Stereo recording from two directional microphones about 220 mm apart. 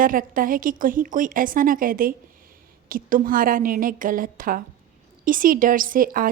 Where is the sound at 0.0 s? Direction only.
40° right (ahead or behind).